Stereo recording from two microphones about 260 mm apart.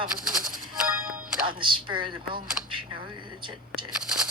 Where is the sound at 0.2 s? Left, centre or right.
Right.